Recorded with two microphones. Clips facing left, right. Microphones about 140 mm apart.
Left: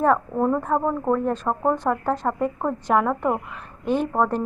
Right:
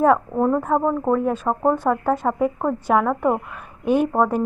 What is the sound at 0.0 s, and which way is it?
Speech, 5° right (ahead or behind).